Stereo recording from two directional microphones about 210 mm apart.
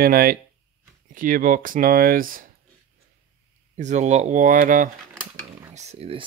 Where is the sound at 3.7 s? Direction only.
35° right (ahead or behind).